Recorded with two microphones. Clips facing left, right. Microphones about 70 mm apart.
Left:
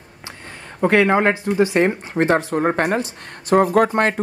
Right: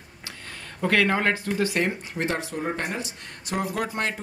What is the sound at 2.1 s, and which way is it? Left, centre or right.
Speech, left.